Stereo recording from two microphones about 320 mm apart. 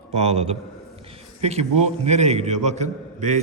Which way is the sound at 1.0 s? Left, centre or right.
Centre.